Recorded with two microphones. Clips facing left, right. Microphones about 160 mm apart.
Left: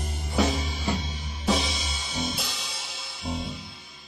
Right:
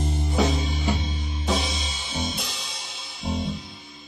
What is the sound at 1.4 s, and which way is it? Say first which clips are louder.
Music: left 1 dB; centre (ahead or behind).